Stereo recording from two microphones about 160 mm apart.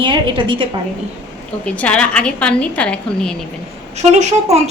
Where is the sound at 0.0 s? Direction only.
30° right (ahead or behind).